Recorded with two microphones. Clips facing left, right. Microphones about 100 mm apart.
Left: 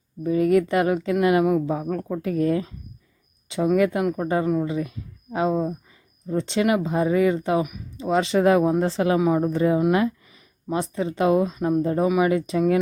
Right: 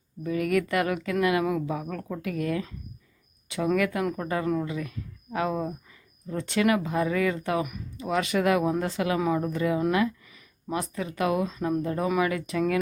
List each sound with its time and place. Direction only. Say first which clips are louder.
0.2 s speech: left 6 dB; 30° left (ahead or behind)
3.8 s speech: left 5 dB; 25° left (ahead or behind)